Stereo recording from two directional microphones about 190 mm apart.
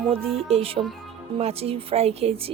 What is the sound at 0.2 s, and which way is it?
Speech, centre (ahead or behind).